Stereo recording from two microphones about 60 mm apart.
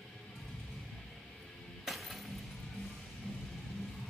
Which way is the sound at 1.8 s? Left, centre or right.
Centre.